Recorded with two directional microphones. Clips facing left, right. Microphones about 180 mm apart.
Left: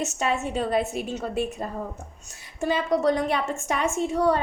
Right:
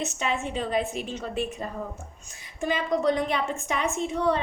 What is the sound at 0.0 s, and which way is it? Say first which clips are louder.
Speech: left 3 dB; 40° left (ahead or behind).